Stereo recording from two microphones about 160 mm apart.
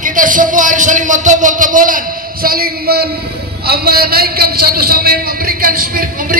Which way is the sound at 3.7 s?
75° right (ahead or behind).